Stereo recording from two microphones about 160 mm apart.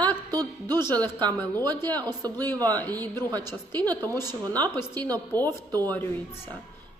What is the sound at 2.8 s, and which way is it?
A woman's voice, 10° left (ahead or behind).